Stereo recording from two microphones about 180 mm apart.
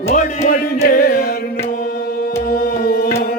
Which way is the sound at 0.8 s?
55° left (ahead or behind).